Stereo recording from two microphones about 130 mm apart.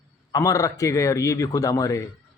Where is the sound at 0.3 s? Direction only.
25° left (ahead or behind).